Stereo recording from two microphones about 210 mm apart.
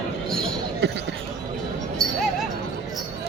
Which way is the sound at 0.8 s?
55° right (ahead or behind).